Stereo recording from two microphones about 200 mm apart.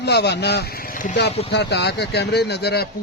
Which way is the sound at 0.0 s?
55° left (ahead or behind).